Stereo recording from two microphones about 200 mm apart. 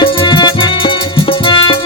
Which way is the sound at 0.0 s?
25° left (ahead or behind).